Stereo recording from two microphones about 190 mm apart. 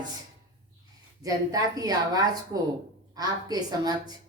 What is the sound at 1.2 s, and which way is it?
A woman's voice, 20° right (ahead or behind).